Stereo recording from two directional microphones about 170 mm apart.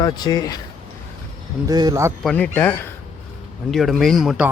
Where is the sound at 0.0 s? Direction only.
20° left (ahead or behind).